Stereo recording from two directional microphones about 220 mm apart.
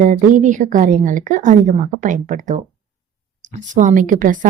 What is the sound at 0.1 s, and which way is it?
A woman's voice, 35° right (ahead or behind).